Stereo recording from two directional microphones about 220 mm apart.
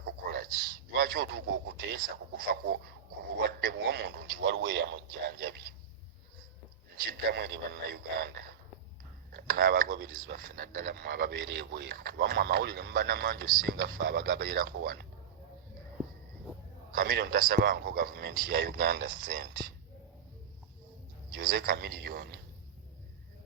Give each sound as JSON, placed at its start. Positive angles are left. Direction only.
{"t": 0.0, "sound": "a sound", "side_deg": -45}
{"t": 0.9, "sound": "speech", "side_deg": -45}
{"t": 4.6, "sound": "speech", "side_deg": -60}
{"t": 7.3, "sound": "speech", "side_deg": -45}
{"t": 16.9, "sound": "a man's voice", "side_deg": -45}
{"t": 21.3, "sound": "speech", "side_deg": -40}